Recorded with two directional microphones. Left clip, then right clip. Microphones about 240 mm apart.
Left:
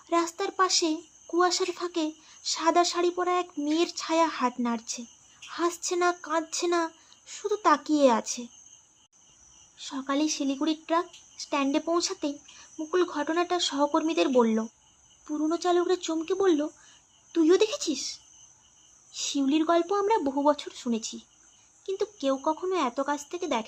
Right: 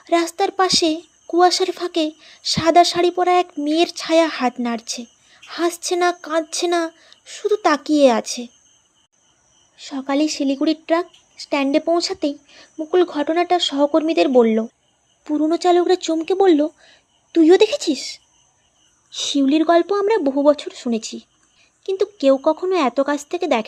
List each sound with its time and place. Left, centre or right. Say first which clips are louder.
0.0 s a woman's voice: right 9 dB; centre
9.7 s speech: right 8 dB; centre